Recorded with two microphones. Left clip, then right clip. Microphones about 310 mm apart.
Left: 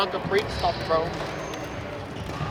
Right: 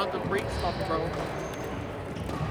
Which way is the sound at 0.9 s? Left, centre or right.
Left.